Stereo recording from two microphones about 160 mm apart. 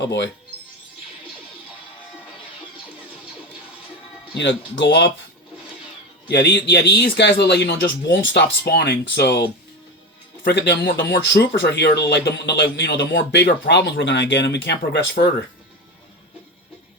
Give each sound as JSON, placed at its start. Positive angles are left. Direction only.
{"t": 0.0, "sound": "speech", "side_deg": 90}
{"t": 4.4, "sound": "speech", "side_deg": 90}
{"t": 6.2, "sound": "speech", "side_deg": 85}